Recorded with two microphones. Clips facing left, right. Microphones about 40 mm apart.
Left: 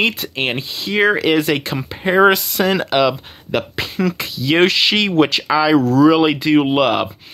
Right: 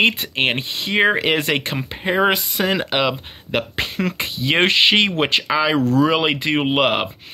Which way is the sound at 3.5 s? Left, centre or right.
Right.